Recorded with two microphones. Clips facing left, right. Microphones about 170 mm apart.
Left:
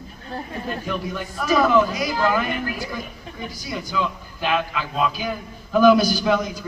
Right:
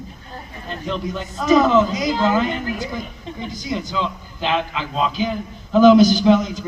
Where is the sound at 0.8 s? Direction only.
20° right (ahead or behind).